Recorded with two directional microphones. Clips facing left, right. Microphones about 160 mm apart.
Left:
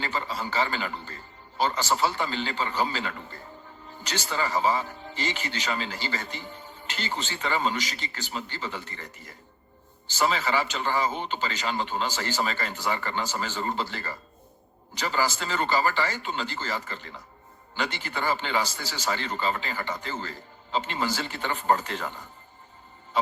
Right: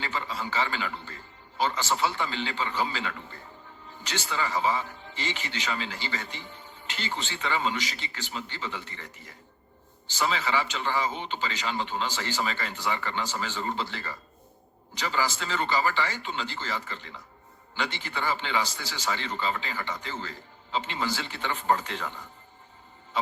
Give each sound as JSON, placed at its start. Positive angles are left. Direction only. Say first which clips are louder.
{"t": 0.0, "sound": "a man's voice", "louder": "left 2 dB", "side_deg": 40}